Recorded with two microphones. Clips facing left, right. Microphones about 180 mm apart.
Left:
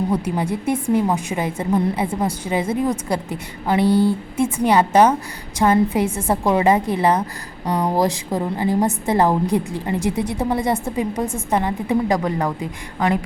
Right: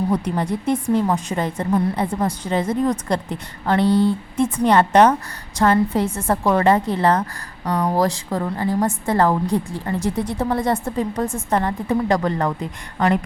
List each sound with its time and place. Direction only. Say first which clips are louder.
0.1 s a woman's voice: even; 5° left (ahead or behind)